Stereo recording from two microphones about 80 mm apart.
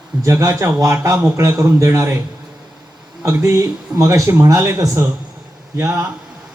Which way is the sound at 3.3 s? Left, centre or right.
Right.